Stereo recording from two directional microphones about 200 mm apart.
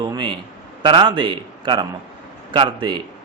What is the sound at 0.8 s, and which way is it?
A man's voice, 25° right (ahead or behind).